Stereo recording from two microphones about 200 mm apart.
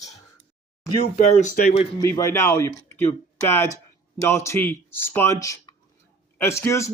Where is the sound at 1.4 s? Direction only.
40° left (ahead or behind).